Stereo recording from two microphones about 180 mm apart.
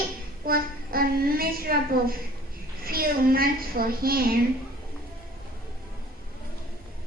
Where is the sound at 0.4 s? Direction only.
55° right (ahead or behind).